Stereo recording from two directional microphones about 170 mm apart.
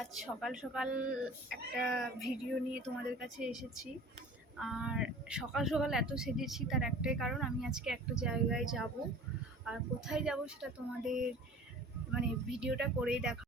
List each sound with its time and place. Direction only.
0.0 s speech: centre (ahead or behind)
4.6 s speech: 5° right (ahead or behind)